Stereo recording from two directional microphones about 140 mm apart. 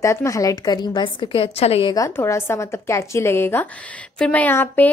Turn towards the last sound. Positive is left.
turn(degrees=15)  # may be behind; listen again after turning